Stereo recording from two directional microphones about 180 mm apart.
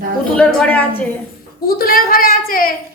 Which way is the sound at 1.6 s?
55° left (ahead or behind).